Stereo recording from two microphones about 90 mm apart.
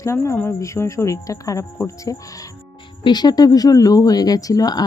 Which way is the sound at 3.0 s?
50° left (ahead or behind).